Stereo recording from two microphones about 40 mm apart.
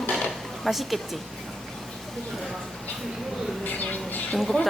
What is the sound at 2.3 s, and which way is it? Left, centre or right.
Speech, centre.